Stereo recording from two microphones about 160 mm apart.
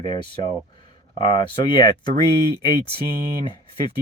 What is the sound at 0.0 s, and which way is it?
Speech, 30° left (ahead or behind).